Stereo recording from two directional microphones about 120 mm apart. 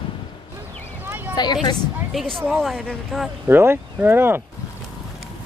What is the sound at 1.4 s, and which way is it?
Speech, 35° left (ahead or behind).